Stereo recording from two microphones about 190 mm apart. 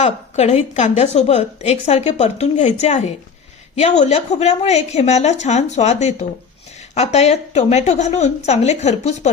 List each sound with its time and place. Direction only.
0.0 s a woman's voice: 35° left (ahead or behind)